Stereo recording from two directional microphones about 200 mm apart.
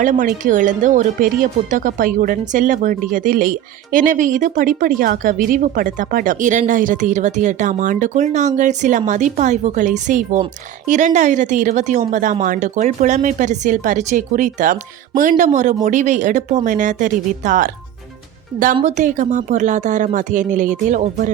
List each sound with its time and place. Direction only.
0.0 s speech: 40° right (ahead or behind)
18.8 s speech: 35° right (ahead or behind)